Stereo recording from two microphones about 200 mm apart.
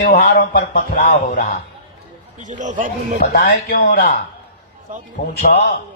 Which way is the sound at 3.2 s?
50° left (ahead or behind).